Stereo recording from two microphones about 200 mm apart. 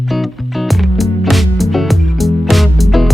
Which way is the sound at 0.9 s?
Centre (ahead or behind).